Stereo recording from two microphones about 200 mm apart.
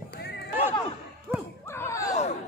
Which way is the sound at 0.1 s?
55° left (ahead or behind).